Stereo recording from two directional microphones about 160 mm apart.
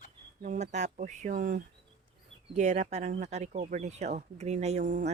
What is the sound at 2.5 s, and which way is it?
Speech, 45° right (ahead or behind).